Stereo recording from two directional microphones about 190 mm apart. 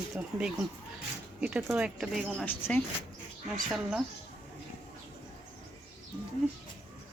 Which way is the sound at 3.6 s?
Centre (ahead or behind).